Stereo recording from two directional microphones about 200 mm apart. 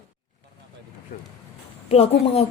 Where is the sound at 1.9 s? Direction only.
30° left (ahead or behind).